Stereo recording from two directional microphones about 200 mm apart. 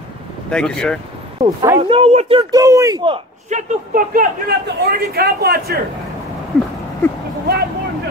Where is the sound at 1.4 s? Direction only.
20° right (ahead or behind).